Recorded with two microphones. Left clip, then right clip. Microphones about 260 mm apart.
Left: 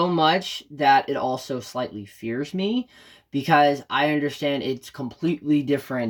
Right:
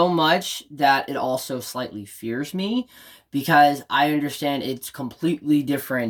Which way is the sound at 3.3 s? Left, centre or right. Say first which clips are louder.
Right 2 dB; centre.